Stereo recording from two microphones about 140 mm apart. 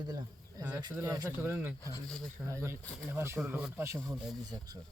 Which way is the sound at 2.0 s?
5° left (ahead or behind).